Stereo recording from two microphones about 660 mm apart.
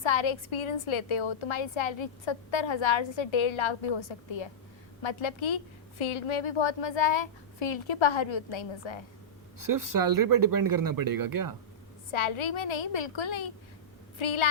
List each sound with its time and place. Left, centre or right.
0.0 s a woman's voice: left
9.6 s speech: right
12.1 s a woman's voice: left